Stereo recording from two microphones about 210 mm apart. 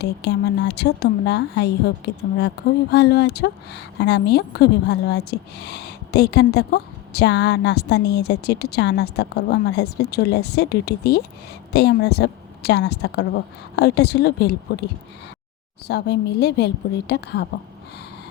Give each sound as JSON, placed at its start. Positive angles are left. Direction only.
{"t": 0.0, "sound": "speech", "side_deg": 55}
{"t": 15.9, "sound": "speech", "side_deg": 50}